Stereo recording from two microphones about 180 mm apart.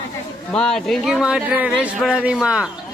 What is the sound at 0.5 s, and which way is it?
Speech, 5° left (ahead or behind).